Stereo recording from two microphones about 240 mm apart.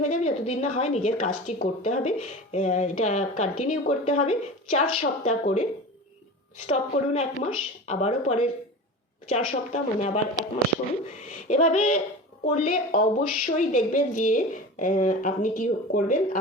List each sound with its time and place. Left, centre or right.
0.1 s speech: left
6.7 s speech: left
11.3 s a woman's voice: left